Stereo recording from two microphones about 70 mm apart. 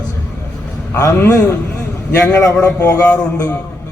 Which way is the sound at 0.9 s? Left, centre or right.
Left.